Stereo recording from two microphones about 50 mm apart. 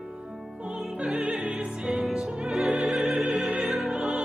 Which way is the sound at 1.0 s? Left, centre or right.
Right.